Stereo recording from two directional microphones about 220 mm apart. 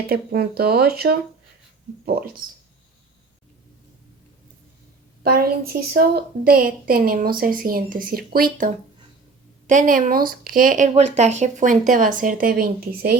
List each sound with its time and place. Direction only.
0.1 s a woman's voice: 45° right (ahead or behind)
5.2 s a woman's voice: 45° right (ahead or behind)
9.6 s speech: 35° right (ahead or behind)